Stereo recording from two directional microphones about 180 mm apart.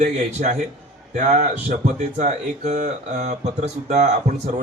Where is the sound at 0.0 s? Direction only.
40° right (ahead or behind).